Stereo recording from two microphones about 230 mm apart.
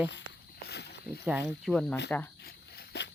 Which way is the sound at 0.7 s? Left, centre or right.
Left.